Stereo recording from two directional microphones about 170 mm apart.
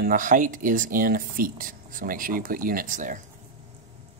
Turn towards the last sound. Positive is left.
turn(degrees=-50)  # may be behind; listen again after turning